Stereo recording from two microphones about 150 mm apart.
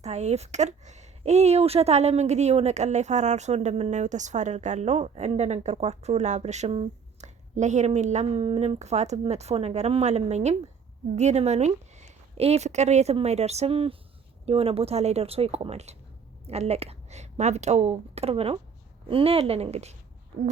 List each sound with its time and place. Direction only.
0.0 s a woman's voice: 50° right (ahead or behind)